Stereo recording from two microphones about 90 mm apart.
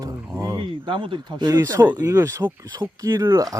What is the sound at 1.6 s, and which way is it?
Speech, 35° right (ahead or behind).